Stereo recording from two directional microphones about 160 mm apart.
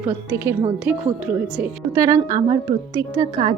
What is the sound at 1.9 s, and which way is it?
Speech, 20° right (ahead or behind).